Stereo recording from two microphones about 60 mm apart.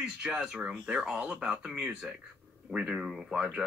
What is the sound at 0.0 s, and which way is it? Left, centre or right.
Speech, centre.